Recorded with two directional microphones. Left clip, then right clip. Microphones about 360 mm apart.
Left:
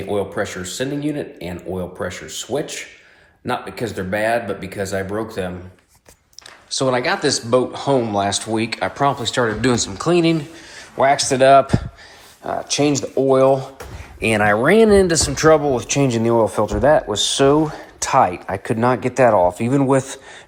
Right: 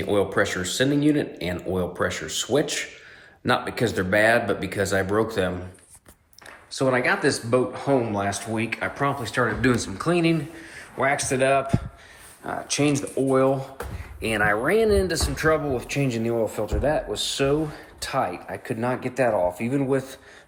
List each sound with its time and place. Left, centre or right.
0.1 s speech: centre
6.7 s speech: centre
16.0 s speech: left
16.3 s speech: centre